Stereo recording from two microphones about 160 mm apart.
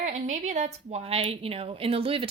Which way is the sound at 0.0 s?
50° right (ahead or behind).